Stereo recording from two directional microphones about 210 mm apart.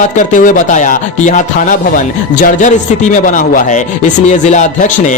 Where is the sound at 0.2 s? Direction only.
40° left (ahead or behind).